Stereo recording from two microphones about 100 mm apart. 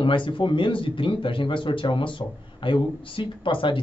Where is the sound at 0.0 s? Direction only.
60° left (ahead or behind).